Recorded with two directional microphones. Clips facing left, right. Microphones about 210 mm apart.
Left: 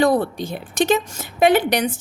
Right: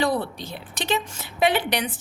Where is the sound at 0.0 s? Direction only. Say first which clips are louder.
Left 7 dB; 45° left (ahead or behind).